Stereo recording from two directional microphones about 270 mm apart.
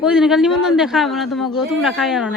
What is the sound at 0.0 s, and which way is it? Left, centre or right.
A man's voice, centre.